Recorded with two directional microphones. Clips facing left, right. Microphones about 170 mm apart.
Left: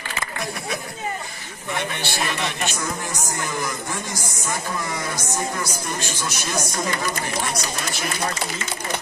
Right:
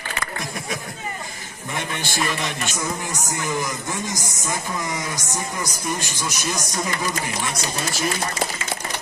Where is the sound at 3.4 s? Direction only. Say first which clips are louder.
Right 4 dB; 15° right (ahead or behind).